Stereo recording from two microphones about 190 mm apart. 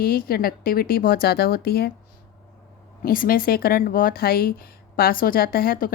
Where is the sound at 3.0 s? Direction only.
50° left (ahead or behind).